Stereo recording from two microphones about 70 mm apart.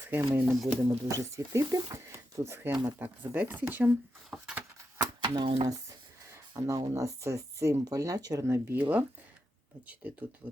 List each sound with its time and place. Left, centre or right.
0.0 s speech: right
0.4 s speech: centre
0.9 s speech: right
3.0 s speech: right
4.3 s a sound: centre
4.9 s speech: right
8.4 s speech: right
8.7 s speech: right